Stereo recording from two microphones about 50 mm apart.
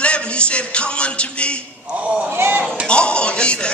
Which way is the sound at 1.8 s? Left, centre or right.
Right.